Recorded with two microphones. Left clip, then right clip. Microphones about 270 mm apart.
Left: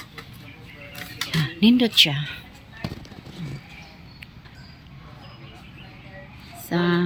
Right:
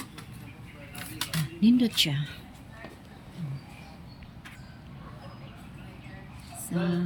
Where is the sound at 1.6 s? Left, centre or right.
Centre.